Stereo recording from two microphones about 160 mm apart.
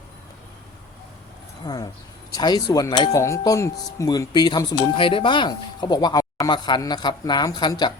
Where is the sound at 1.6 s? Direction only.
25° left (ahead or behind).